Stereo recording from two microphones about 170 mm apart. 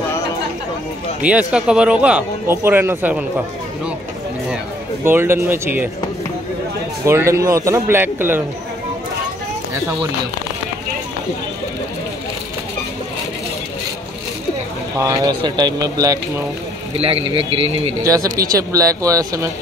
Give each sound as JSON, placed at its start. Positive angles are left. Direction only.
{"t": 1.5, "sound": "speech", "side_deg": -5}
{"t": 5.0, "sound": "speech", "side_deg": -15}
{"t": 7.1, "sound": "speech", "side_deg": -15}
{"t": 15.0, "sound": "speech", "side_deg": -20}
{"t": 16.9, "sound": "a man's voice", "side_deg": -35}
{"t": 18.0, "sound": "speech", "side_deg": -20}